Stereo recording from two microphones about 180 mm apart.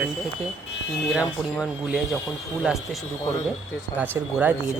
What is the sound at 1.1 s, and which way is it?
Speech, centre (ahead or behind).